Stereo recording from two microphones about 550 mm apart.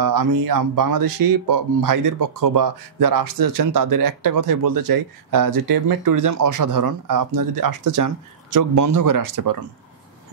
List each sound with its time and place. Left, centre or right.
0.0 s speech: right